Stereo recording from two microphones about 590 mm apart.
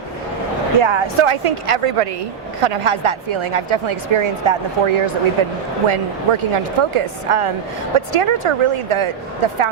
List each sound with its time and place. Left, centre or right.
0.8 s speech: right